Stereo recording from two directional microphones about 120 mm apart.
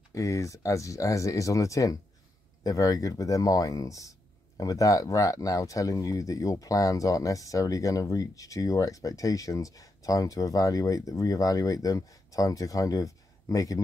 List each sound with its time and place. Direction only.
0.1 s speech: 25° left (ahead or behind)